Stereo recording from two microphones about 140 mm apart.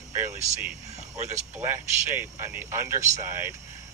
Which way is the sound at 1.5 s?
15° right (ahead or behind).